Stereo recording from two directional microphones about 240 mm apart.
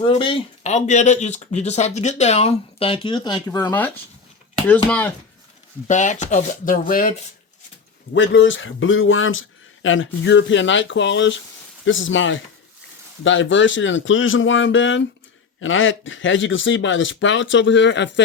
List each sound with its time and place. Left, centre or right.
0.0 s speech: left
5.9 s speech: left
8.1 s speech: left